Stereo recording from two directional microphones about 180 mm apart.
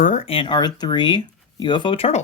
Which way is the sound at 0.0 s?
40° left (ahead or behind).